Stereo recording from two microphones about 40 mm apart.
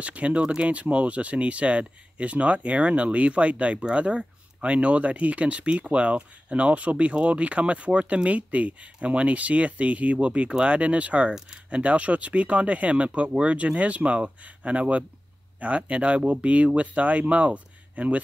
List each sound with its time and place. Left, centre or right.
0.0 s speech: right
0.4 s speech: right
0.7 s speech: right